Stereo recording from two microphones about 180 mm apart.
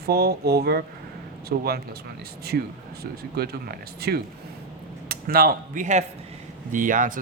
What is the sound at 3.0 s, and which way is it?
Speech, 60° right (ahead or behind).